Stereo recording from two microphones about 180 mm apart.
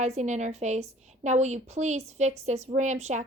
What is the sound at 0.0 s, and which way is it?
Speech, 40° right (ahead or behind).